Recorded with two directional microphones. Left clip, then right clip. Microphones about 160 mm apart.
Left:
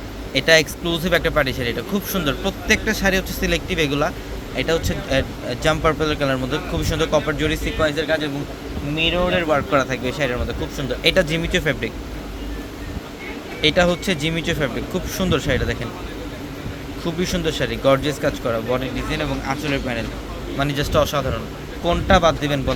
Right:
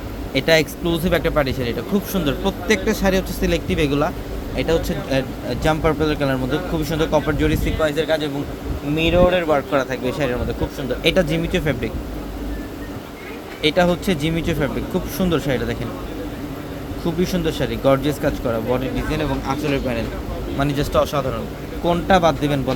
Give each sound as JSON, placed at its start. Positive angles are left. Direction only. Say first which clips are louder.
{"t": 0.3, "sound": "speech", "louder": "left 1 dB", "side_deg": -10}
{"t": 9.6, "sound": "speech", "louder": "left 1 dB", "side_deg": 0}
{"t": 13.6, "sound": "speech", "louder": "even", "side_deg": 0}
{"t": 17.0, "sound": "speech", "louder": "right 1 dB", "side_deg": -5}